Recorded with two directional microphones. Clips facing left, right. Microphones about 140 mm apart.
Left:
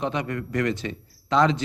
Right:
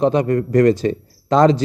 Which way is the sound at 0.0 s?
40° right (ahead or behind).